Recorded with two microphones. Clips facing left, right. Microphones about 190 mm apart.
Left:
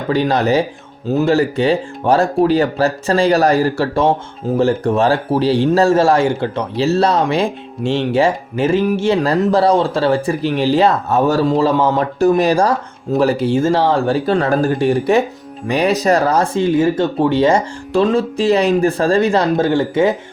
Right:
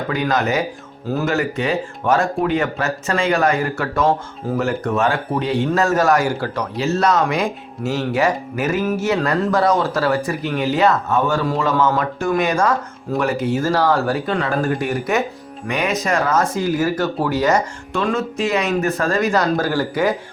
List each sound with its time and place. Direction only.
0.1 s speech: 30° left (ahead or behind)